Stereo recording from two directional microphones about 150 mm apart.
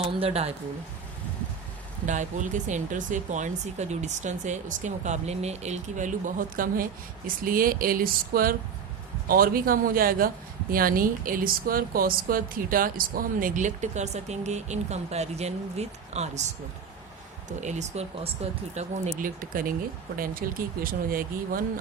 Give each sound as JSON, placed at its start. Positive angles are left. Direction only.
{"t": 0.0, "sound": "a woman's voice", "side_deg": -40}
{"t": 2.0, "sound": "speech", "side_deg": -55}
{"t": 17.6, "sound": "speech", "side_deg": -50}
{"t": 19.4, "sound": "speech", "side_deg": -65}